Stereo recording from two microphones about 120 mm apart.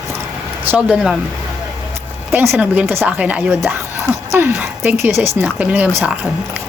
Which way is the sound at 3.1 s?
10° right (ahead or behind).